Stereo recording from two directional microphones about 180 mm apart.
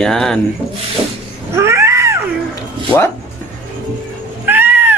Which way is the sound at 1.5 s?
15° right (ahead or behind).